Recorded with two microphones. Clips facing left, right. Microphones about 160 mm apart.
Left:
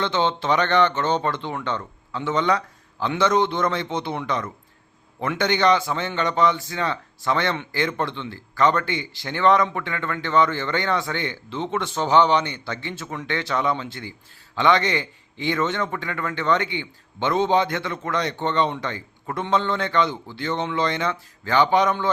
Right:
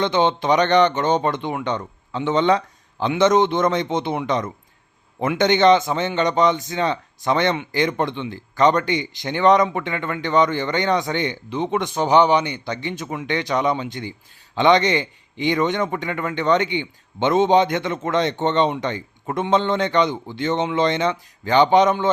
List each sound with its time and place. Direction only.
0.0 s a man's voice: 15° right (ahead or behind)